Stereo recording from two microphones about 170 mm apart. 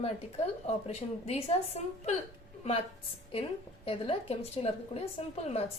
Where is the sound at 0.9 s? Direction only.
35° left (ahead or behind).